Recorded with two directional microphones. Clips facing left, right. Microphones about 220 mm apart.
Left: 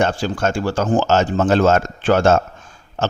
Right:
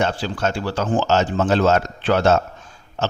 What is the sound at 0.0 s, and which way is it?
A man's voice, 45° left (ahead or behind).